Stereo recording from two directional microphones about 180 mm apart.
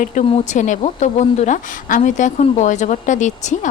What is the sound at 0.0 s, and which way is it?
A woman's voice, 45° left (ahead or behind).